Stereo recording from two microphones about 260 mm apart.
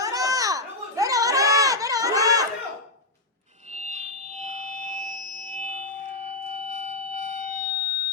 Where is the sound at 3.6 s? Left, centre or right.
Right.